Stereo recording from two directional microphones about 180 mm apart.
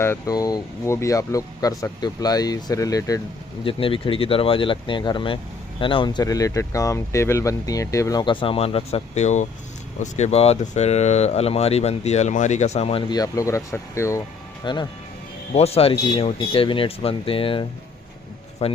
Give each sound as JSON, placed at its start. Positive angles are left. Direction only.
{"t": 0.0, "sound": "speech", "side_deg": 15}
{"t": 3.6, "sound": "speech", "side_deg": 30}